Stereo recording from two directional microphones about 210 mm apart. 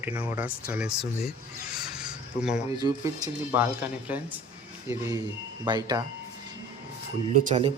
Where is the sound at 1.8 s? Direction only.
5° right (ahead or behind).